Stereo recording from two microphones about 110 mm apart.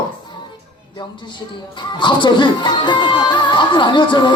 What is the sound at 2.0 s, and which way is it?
Speech, 45° left (ahead or behind).